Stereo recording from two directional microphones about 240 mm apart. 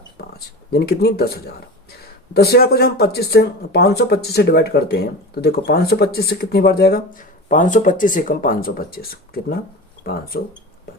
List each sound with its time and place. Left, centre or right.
0.2 s speech: left